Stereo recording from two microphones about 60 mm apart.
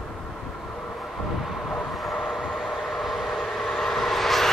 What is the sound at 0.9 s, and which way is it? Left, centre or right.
Vehicle, centre.